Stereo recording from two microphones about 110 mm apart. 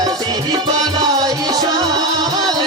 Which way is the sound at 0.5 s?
35° right (ahead or behind).